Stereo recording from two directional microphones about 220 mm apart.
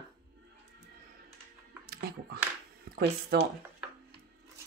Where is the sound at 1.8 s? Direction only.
45° right (ahead or behind).